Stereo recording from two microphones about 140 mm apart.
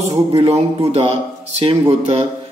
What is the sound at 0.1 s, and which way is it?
Speech, 45° right (ahead or behind).